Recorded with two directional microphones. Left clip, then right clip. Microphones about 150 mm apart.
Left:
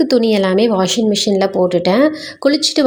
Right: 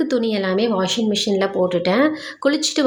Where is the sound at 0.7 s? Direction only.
30° left (ahead or behind).